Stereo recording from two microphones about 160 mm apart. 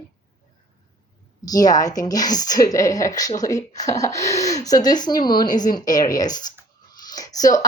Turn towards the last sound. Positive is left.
turn(degrees=20)  # may be behind; listen again after turning